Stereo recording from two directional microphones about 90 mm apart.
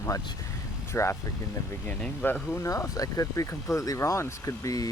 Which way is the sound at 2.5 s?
35° left (ahead or behind).